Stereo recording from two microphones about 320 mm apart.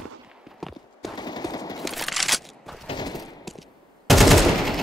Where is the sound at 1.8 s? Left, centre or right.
Centre.